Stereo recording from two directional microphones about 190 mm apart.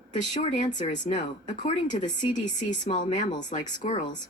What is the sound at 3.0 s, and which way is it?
Speech, 40° left (ahead or behind).